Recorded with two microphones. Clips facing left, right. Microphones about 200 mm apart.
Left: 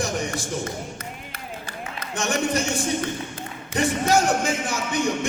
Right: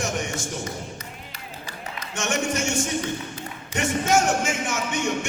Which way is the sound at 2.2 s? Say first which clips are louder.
Left 2 dB; 35° left (ahead or behind).